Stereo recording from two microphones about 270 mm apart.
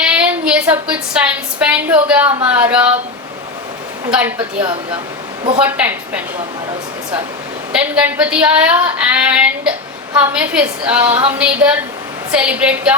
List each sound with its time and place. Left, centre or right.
0.0 s a woman's voice: centre
4.4 s a woman's voice: centre
5.5 s a woman's voice: centre
7.7 s a woman's voice: centre